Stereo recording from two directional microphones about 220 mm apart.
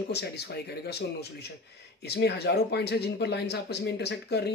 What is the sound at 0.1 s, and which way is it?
Speech, 50° left (ahead or behind).